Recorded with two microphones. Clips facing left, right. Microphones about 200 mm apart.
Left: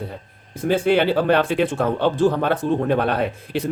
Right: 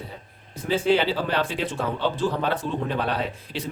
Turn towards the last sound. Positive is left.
turn(degrees=55)  # may be behind; listen again after turning